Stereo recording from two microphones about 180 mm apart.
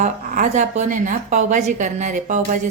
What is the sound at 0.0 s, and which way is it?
A woman's voice, 45° right (ahead or behind).